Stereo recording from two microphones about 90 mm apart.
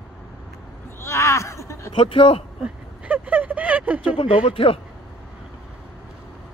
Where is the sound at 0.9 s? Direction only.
30° left (ahead or behind).